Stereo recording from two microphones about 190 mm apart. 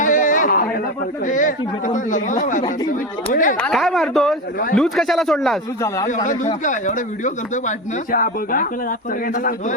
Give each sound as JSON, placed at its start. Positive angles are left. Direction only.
{"t": 0.0, "sound": "a sound", "side_deg": 45}
{"t": 1.2, "sound": "speech", "side_deg": 45}
{"t": 3.6, "sound": "speech", "side_deg": 0}
{"t": 6.1, "sound": "speech", "side_deg": 40}